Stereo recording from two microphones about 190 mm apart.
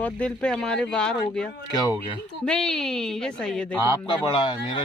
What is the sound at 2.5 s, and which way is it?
Speech, 5° left (ahead or behind).